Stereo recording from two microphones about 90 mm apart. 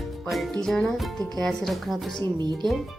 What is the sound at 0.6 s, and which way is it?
Speech, 5° left (ahead or behind).